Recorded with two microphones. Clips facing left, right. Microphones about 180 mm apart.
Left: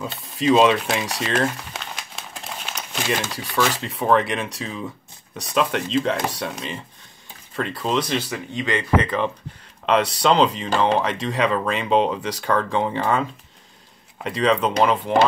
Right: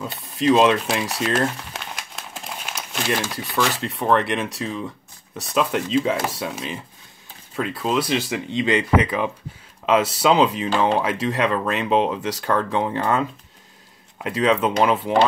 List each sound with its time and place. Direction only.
0.0 s speech: centre (ahead or behind)
8.3 s speech: 20° right (ahead or behind)
9.0 s speech: 10° right (ahead or behind)